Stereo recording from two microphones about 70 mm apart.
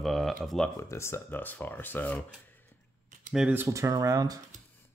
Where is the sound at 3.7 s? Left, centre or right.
Right.